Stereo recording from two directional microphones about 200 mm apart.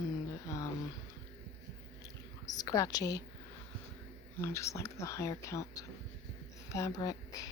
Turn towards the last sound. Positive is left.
turn(degrees=20)  # may be behind; listen again after turning